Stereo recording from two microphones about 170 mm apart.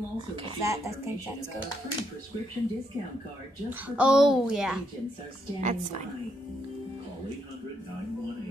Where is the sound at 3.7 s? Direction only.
5° right (ahead or behind).